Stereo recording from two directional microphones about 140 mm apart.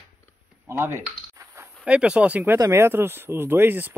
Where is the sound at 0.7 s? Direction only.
20° right (ahead or behind).